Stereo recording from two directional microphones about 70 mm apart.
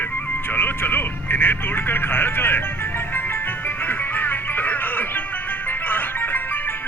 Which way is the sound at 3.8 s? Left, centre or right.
Left.